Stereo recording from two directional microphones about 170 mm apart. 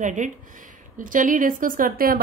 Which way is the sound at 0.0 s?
45° right (ahead or behind).